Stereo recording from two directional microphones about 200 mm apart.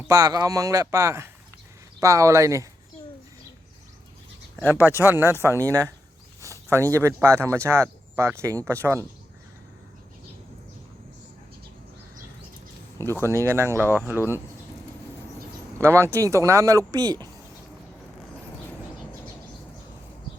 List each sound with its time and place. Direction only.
0.1 s speech: 15° right (ahead or behind)
4.7 s speech: 10° right (ahead or behind)
13.2 s speech: 15° right (ahead or behind)
15.8 s speech: 15° right (ahead or behind)